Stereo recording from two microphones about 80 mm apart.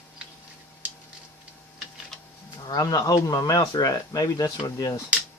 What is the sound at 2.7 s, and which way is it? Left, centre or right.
Speech, left.